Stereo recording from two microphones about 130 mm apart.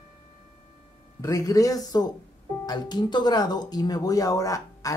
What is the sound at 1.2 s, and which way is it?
Speech, 25° left (ahead or behind).